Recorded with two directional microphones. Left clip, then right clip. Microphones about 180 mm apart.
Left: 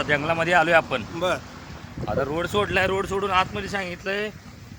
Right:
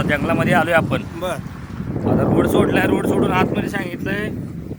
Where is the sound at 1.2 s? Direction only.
Centre (ahead or behind).